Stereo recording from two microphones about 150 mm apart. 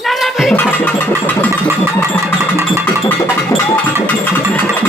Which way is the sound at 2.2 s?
20° right (ahead or behind).